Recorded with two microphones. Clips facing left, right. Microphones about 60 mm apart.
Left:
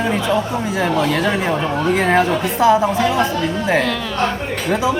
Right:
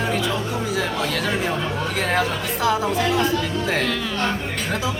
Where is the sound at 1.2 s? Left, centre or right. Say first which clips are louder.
Left 5 dB; left.